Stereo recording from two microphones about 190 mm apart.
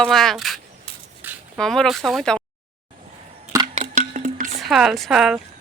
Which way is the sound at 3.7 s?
40° right (ahead or behind).